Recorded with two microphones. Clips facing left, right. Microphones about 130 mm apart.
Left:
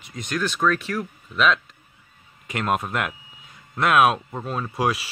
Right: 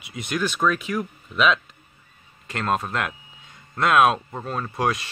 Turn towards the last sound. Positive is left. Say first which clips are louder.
# even
turn(degrees=5)  # may be behind; listen again after turning